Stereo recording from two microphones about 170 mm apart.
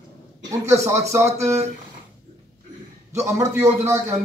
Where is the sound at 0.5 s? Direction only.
20° right (ahead or behind).